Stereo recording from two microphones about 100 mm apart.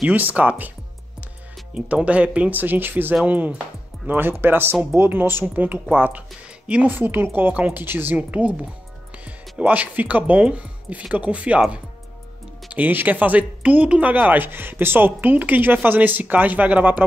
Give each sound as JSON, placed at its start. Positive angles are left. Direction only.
{"t": 0.0, "sound": "speech", "side_deg": -15}
{"t": 1.7, "sound": "speech", "side_deg": -10}
{"t": 9.6, "sound": "speech", "side_deg": -15}